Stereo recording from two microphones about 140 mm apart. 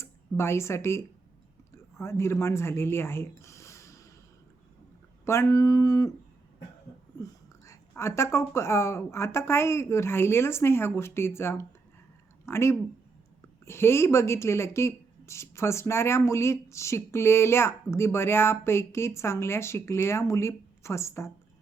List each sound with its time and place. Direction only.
0.0 s speech: 20° left (ahead or behind)
5.2 s speech: 20° left (ahead or behind)
7.2 s speech: 20° left (ahead or behind)